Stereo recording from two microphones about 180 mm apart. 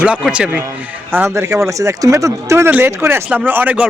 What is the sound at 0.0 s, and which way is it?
A man's voice, 5° right (ahead or behind).